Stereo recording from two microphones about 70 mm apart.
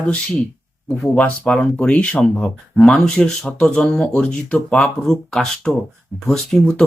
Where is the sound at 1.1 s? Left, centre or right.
Centre.